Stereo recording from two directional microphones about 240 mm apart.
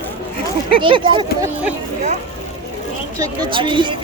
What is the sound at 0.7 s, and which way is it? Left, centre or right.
Speech, right.